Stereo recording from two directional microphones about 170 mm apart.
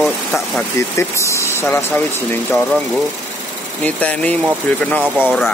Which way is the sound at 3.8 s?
10° left (ahead or behind).